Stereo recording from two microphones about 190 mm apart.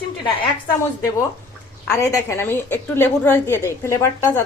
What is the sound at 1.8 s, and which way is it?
A woman's voice, 15° left (ahead or behind).